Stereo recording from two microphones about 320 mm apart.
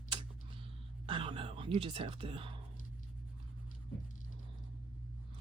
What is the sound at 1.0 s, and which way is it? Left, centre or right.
Speech, centre.